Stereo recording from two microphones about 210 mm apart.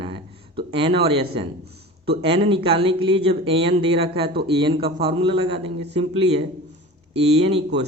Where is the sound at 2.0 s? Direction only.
25° right (ahead or behind).